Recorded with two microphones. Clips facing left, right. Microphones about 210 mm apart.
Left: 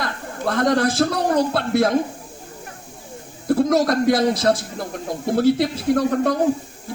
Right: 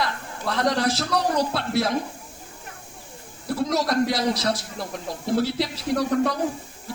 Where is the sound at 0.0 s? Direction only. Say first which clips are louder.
Left 3 dB; 50° left (ahead or behind).